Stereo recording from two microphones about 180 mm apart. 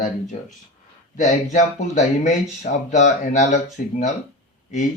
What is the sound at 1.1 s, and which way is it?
Speech, 45° left (ahead or behind).